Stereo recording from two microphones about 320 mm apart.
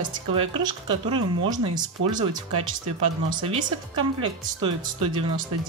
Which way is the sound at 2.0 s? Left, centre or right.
Right.